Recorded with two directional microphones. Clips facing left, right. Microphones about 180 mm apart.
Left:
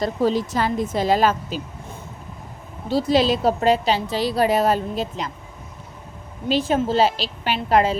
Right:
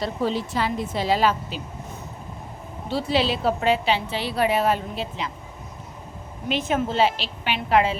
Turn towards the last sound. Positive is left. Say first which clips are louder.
# left 2 dB
turn(degrees=40)  # may be behind; listen again after turning